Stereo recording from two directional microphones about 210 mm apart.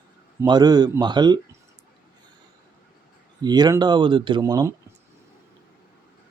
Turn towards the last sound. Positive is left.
turn(degrees=-15)  # may be behind; listen again after turning